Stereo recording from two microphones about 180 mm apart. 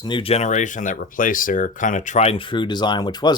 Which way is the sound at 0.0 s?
30° left (ahead or behind).